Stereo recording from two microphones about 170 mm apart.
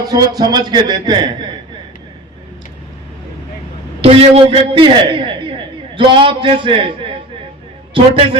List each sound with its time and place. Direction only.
0.1 s a man's voice: 25° right (ahead or behind)
4.0 s a man's voice: 35° right (ahead or behind)